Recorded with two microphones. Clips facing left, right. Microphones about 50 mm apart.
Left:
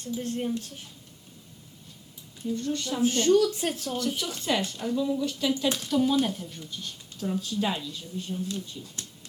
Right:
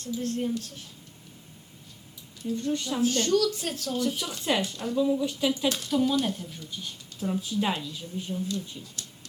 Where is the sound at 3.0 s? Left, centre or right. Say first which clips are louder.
Left 3 dB; centre.